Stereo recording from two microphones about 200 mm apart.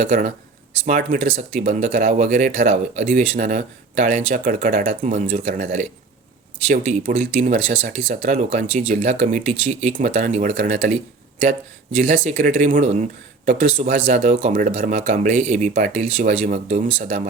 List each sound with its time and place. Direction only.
0.0 s speech: 40° right (ahead or behind)
12.1 s a man's voice: 40° right (ahead or behind)